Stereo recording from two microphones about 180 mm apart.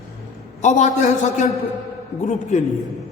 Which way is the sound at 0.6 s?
40° left (ahead or behind).